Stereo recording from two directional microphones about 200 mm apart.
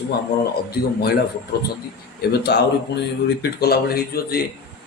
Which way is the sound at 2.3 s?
55° left (ahead or behind).